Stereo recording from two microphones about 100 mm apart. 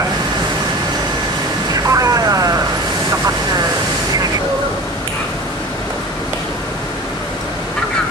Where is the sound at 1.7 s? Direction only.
35° right (ahead or behind).